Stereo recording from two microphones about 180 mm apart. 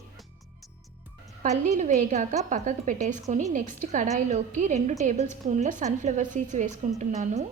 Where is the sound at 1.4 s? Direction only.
45° right (ahead or behind).